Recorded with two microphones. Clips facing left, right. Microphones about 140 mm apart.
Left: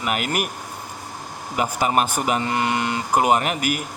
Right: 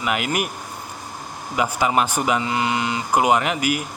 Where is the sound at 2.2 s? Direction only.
50° left (ahead or behind).